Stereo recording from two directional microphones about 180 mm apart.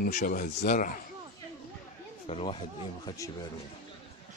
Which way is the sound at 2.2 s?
30° left (ahead or behind).